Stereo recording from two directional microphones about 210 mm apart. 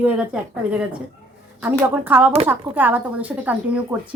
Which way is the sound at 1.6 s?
10° right (ahead or behind).